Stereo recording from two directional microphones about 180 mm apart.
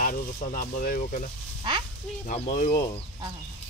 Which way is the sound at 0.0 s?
45° left (ahead or behind).